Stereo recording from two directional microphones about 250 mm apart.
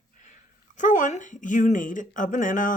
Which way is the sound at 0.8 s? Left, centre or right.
Left.